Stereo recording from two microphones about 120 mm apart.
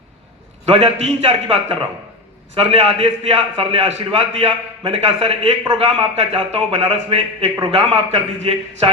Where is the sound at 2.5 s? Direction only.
55° right (ahead or behind).